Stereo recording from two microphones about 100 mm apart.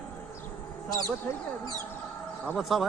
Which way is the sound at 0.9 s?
40° left (ahead or behind).